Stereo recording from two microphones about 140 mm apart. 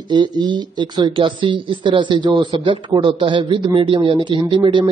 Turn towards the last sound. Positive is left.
turn(degrees=-35)  # may be behind; listen again after turning